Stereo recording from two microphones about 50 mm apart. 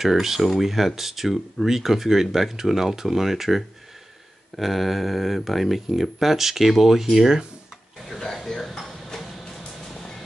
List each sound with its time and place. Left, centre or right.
0.0 s speech: centre
8.5 s a sound: centre
9.6 s vehicle: centre